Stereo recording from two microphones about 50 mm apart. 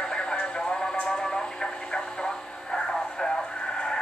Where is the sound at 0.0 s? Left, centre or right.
Centre.